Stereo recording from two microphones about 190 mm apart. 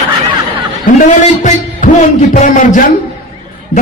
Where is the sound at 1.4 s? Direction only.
40° left (ahead or behind).